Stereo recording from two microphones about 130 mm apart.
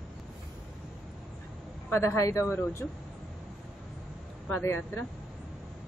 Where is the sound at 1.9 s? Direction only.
20° left (ahead or behind).